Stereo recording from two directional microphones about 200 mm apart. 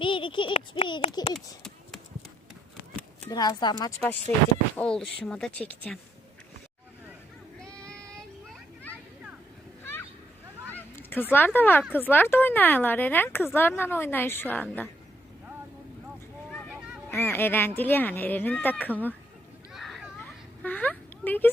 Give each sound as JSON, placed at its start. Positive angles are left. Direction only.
{"t": 0.0, "sound": "speech", "side_deg": 25}
{"t": 3.2, "sound": "speech", "side_deg": 20}
{"t": 4.8, "sound": "speech", "side_deg": 5}
{"t": 7.6, "sound": "child singing", "side_deg": 5}
{"t": 8.9, "sound": "a sound", "side_deg": 10}
{"t": 10.7, "sound": "honk", "side_deg": 10}
{"t": 11.9, "sound": "speech", "side_deg": 10}
{"t": 17.1, "sound": "speech", "side_deg": 10}
{"t": 19.7, "sound": "children playing", "side_deg": 0}